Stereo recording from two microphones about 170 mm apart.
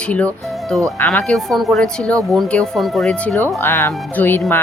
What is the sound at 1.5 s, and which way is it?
Speech, centre (ahead or behind).